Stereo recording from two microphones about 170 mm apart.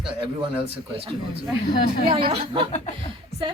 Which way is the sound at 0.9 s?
30° right (ahead or behind).